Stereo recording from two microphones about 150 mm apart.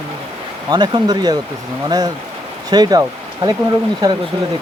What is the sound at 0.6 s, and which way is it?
Speech, 30° right (ahead or behind).